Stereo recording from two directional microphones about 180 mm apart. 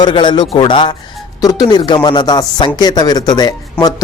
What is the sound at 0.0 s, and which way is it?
Speech, 25° left (ahead or behind).